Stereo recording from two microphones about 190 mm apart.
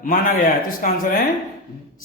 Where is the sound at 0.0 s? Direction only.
45° left (ahead or behind).